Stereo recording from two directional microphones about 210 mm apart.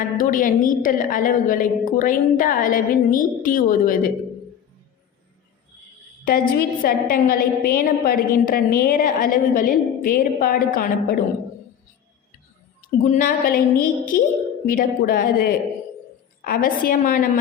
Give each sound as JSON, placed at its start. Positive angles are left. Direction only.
{"t": 0.2, "sound": "a woman's voice", "side_deg": 40}
{"t": 6.2, "sound": "a woman's voice", "side_deg": 45}
{"t": 13.1, "sound": "a woman's voice", "side_deg": 40}